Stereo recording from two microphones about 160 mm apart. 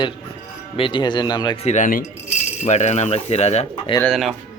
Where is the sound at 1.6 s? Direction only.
50° left (ahead or behind).